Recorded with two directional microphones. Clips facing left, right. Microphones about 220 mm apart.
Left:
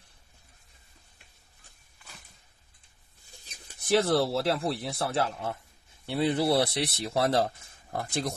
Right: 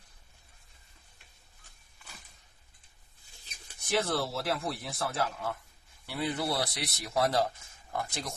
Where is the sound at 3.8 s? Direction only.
30° left (ahead or behind).